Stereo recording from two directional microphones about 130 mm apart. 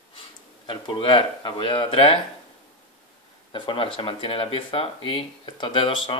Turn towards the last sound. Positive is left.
turn(degrees=40)  # may be behind; listen again after turning